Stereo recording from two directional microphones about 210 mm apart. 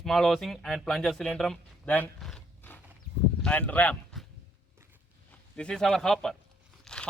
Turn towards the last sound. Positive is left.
turn(degrees=5)  # may be behind; listen again after turning